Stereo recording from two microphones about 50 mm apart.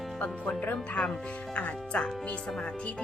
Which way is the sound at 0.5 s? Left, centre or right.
Left.